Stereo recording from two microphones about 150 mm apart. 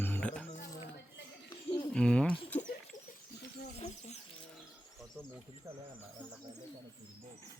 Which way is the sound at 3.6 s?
45° left (ahead or behind).